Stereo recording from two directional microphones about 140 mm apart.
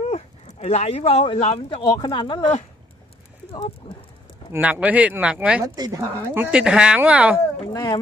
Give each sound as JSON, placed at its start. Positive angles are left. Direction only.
{"t": 0.0, "sound": "a sound", "side_deg": 50}
{"t": 1.4, "sound": "speech", "side_deg": 40}
{"t": 1.8, "sound": "speech", "side_deg": 30}
{"t": 4.5, "sound": "speech", "side_deg": -10}
{"t": 5.8, "sound": "a woman's voice", "side_deg": -25}
{"t": 6.5, "sound": "speech", "side_deg": -5}
{"t": 7.6, "sound": "speech", "side_deg": 30}